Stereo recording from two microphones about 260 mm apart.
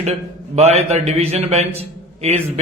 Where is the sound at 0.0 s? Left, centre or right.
Right.